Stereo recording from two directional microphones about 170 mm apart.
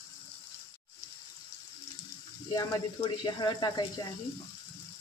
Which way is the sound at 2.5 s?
20° left (ahead or behind).